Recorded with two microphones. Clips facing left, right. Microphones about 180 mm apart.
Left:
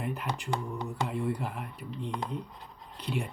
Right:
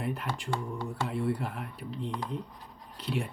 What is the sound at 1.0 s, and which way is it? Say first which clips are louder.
Speech: right 1 dB; centre (ahead or behind).